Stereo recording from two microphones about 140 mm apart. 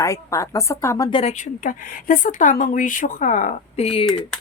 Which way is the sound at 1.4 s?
70° left (ahead or behind).